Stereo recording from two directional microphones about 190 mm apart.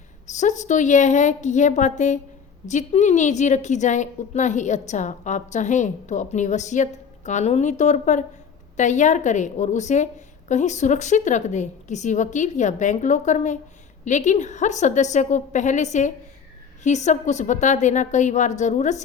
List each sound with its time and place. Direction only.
0.3 s a woman's voice: 40° left (ahead or behind)